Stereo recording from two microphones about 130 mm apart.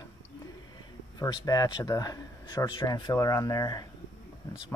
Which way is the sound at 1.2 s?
30° left (ahead or behind).